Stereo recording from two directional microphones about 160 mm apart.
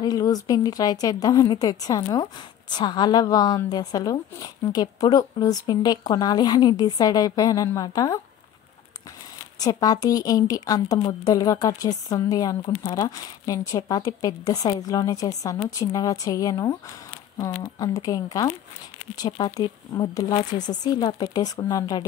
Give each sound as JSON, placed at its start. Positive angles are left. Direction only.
{"t": 0.0, "sound": "a woman's voice", "side_deg": 25}
{"t": 9.6, "sound": "a woman's voice", "side_deg": 25}